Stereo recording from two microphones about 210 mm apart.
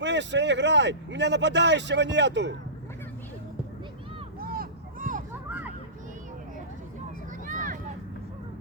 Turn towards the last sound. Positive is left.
turn(degrees=-40)  # may be behind; listen again after turning